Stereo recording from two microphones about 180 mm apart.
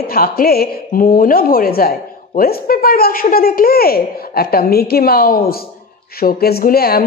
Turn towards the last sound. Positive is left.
turn(degrees=55)  # may be behind; listen again after turning